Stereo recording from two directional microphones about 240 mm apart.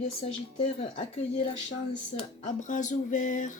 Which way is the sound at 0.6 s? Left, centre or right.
Centre.